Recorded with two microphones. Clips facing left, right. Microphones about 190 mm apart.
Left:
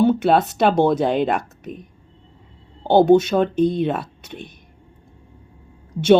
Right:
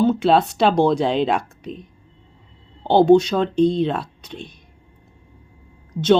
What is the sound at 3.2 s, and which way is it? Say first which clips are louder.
Speech: left 2 dB; 10° left (ahead or behind).